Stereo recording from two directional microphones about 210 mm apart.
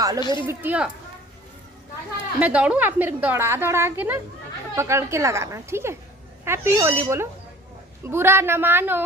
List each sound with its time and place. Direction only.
0.2 s speech: 20° left (ahead or behind)
0.4 s a woman's voice: 10° right (ahead or behind)
2.4 s a woman's voice: 5° right (ahead or behind)